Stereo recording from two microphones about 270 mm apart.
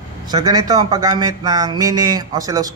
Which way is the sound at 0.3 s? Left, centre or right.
Centre.